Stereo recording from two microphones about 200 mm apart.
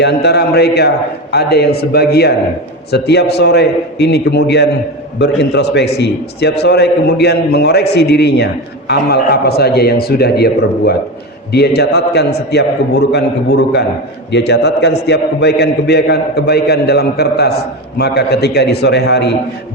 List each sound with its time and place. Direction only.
0.0 s a man's voice: 55° left (ahead or behind)
14.3 s a man's voice: 60° left (ahead or behind)